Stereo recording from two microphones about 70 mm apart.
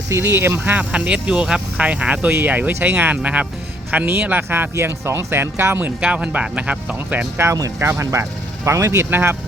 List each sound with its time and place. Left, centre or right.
0.1 s speech: right
0.7 s speech: centre; by 5.8 s right
5.8 s speech: centre
7.8 s speech: right
9.0 s speech: right